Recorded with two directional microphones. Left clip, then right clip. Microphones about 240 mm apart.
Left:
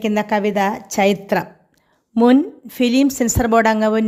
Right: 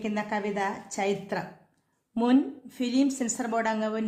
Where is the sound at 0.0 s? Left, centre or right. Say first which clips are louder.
Left 12 dB; left.